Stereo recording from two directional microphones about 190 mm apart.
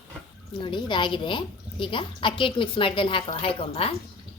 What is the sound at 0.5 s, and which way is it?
A woman's voice, 25° left (ahead or behind).